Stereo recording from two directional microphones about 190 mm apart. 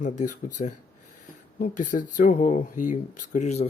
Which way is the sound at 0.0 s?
40° left (ahead or behind).